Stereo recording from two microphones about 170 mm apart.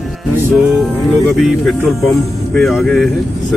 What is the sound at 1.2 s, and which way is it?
Speech, centre (ahead or behind).